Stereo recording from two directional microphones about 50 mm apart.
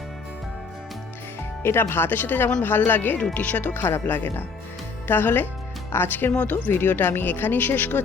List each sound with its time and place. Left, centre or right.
1.6 s speech: left